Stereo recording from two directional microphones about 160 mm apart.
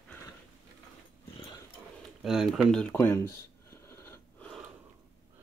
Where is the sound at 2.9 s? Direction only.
15° left (ahead or behind).